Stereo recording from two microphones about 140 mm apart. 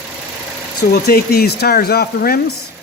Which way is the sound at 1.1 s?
90° left.